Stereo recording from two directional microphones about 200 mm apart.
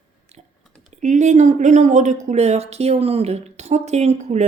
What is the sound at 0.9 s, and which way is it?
Speech, 35° right (ahead or behind).